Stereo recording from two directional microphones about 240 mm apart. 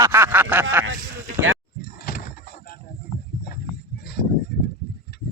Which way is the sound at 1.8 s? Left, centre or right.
Left.